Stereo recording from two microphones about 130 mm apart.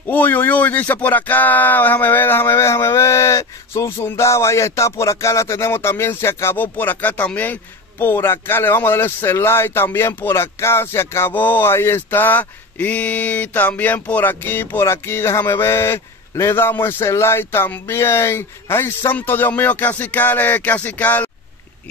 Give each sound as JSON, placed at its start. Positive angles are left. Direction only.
{"t": 0.0, "sound": "speech", "side_deg": 15}